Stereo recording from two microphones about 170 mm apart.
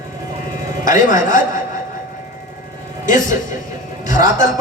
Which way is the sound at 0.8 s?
50° left (ahead or behind).